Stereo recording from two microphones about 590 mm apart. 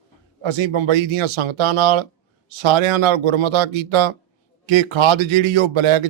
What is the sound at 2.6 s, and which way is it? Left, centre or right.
A man's voice, right.